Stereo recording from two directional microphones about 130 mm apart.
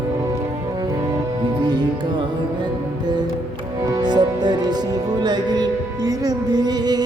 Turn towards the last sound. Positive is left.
turn(degrees=-30)  # may be behind; listen again after turning